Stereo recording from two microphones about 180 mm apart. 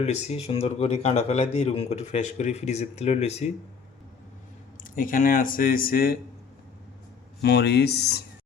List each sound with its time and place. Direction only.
0.0 s speech: 40° left (ahead or behind)
4.8 s speech: 50° left (ahead or behind)
7.4 s speech: 65° left (ahead or behind)